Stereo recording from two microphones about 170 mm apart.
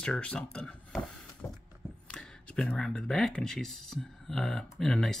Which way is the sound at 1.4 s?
15° left (ahead or behind).